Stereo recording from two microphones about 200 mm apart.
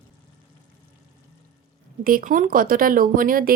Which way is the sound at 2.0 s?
45° right (ahead or behind).